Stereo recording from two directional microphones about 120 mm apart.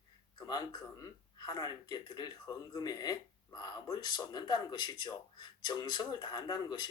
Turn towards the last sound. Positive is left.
turn(degrees=35)  # may be behind; listen again after turning